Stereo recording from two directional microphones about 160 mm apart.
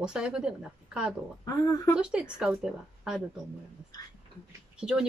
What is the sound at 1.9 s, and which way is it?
Speech, 5° right (ahead or behind).